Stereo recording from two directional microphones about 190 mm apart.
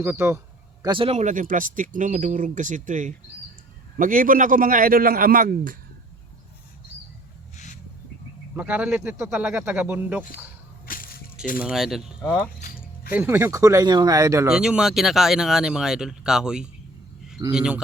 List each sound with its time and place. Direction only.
0.0 s a sound: 10° right (ahead or behind)
0.9 s speech: 30° right (ahead or behind); by 5.7 s 45° right (ahead or behind)
7.5 s a sound: 40° left (ahead or behind)
8.5 s speech: 10° right (ahead or behind)
10.8 s whip: 50° left (ahead or behind)
11.6 s speech: centre (ahead or behind)
12.5 s music: 45° left (ahead or behind)
13.1 s speech: 10° right (ahead or behind)
14.4 s speech: 5° right (ahead or behind)